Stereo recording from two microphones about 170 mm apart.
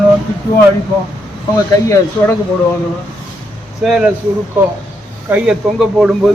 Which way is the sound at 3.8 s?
5° right (ahead or behind).